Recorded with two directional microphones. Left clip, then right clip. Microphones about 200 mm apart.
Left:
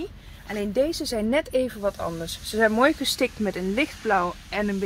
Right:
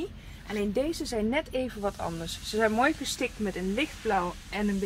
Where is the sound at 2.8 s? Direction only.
40° left (ahead or behind); by 4.6 s 60° left (ahead or behind).